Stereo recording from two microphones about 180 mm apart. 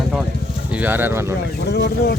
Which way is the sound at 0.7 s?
10° right (ahead or behind).